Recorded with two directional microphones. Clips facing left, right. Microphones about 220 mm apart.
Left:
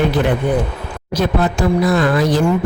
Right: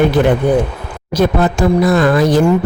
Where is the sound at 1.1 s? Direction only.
50° right (ahead or behind).